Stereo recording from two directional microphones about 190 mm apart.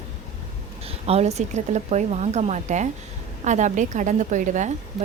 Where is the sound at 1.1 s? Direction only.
35° right (ahead or behind).